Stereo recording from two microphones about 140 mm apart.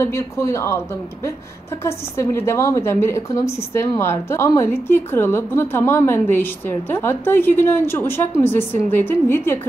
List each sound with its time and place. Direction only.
0.0 s a woman's voice: 20° left (ahead or behind)
1.8 s a woman's voice: 20° left (ahead or behind)